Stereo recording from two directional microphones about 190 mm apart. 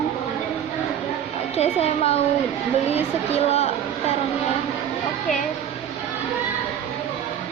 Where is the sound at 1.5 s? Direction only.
35° left (ahead or behind).